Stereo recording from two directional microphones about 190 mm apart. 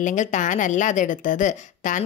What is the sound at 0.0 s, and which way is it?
A woman's voice, 40° left (ahead or behind).